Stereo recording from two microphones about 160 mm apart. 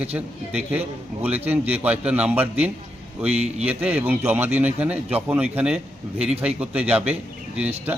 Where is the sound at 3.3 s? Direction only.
40° right (ahead or behind).